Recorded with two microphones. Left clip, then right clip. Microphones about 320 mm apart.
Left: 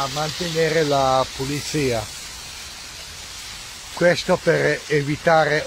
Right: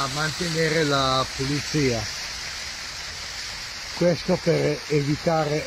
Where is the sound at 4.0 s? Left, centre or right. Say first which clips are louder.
Left 5 dB; left.